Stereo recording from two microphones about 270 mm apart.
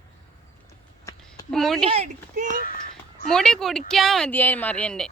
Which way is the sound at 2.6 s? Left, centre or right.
Left.